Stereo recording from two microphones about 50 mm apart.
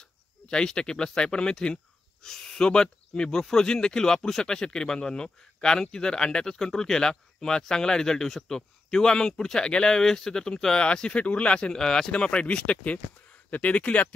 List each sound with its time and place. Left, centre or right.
0.0 s speech: centre
11.7 s speech: centre; by 14.0 s left